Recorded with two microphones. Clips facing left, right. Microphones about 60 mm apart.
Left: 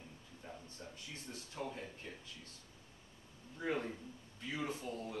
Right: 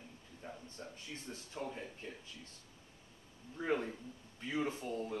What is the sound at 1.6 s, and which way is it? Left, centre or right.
Speech, centre.